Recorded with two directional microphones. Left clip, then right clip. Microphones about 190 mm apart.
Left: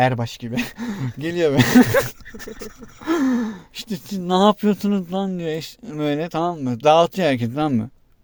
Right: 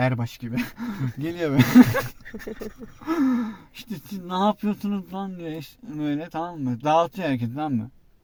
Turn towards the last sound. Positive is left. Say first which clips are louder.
# left 6 dB
turn(degrees=55)  # may be behind; listen again after turning